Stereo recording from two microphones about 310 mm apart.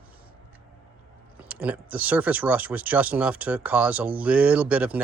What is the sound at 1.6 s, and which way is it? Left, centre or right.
Speech, centre.